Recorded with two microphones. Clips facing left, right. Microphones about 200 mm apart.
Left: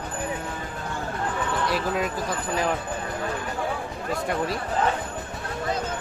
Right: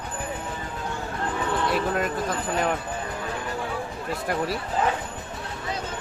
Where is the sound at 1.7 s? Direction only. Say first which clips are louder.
Right 1 dB; centre (ahead or behind).